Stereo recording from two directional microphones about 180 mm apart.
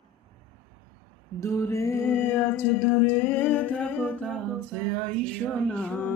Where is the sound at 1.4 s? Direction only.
15° left (ahead or behind).